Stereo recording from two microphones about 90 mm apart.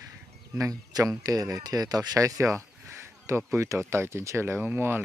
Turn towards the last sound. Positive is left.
turn(degrees=-20)  # may be behind; listen again after turning